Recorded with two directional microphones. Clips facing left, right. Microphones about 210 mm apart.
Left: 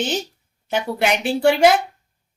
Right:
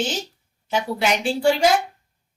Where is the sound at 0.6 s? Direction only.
60° left (ahead or behind).